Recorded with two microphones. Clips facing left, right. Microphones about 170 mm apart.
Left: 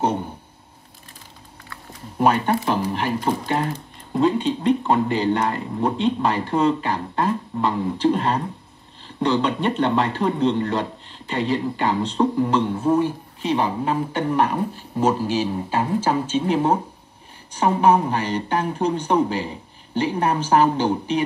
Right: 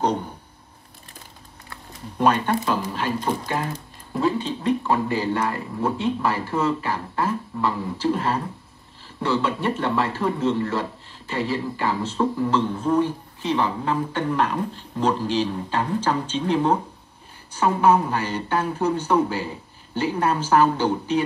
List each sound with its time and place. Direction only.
2.1 s speech: 15° left (ahead or behind)